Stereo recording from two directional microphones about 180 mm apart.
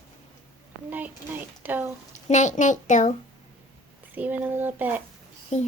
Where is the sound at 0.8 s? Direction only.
10° right (ahead or behind).